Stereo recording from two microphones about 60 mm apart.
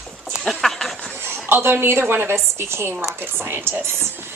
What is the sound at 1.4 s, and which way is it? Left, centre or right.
A woman's voice, right.